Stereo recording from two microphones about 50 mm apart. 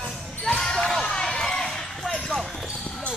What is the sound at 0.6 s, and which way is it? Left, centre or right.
Basketball bounce, centre.